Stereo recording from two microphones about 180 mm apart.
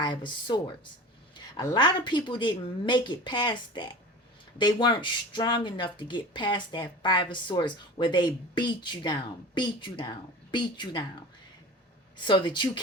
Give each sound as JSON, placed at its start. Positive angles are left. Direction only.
{"t": 0.0, "sound": "speech", "side_deg": 25}
{"t": 1.6, "sound": "speech", "side_deg": 25}
{"t": 12.1, "sound": "speech", "side_deg": 25}